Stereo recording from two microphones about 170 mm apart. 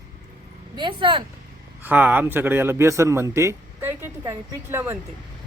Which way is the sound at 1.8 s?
10° right (ahead or behind).